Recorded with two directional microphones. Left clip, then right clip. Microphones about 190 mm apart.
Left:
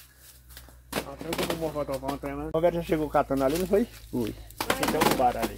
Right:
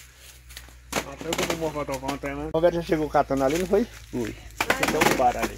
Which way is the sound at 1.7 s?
45° right (ahead or behind).